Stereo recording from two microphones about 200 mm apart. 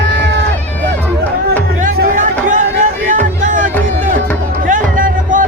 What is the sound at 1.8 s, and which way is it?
Music, 40° right (ahead or behind).